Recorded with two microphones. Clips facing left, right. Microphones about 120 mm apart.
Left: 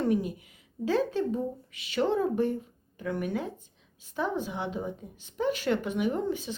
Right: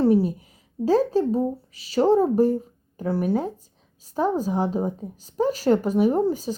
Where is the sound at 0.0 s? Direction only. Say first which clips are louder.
Right 8 dB; 35° right (ahead or behind).